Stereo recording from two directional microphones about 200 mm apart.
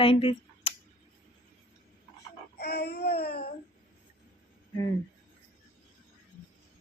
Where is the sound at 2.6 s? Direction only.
55° left (ahead or behind).